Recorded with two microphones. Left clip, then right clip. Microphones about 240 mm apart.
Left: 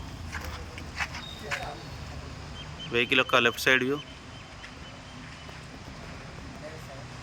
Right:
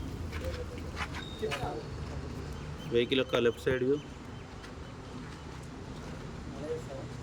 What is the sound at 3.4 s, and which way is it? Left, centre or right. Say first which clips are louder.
Speech: left 5 dB; left.